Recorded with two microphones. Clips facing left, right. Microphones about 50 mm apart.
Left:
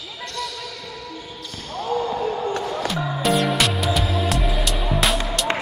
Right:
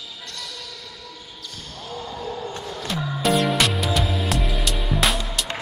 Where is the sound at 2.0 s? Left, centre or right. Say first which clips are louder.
Left 7 dB; left.